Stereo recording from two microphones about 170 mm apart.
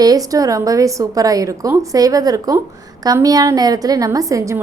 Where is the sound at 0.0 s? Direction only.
20° right (ahead or behind).